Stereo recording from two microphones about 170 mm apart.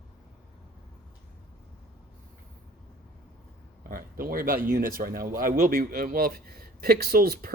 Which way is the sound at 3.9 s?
55° right (ahead or behind).